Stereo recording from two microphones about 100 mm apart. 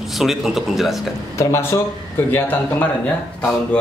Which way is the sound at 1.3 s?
30° left (ahead or behind).